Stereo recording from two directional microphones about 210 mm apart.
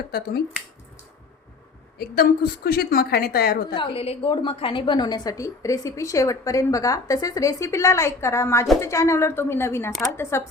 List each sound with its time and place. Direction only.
2.0 s a woman's voice: 45° left (ahead or behind)
3.8 s a woman's voice: 25° left (ahead or behind)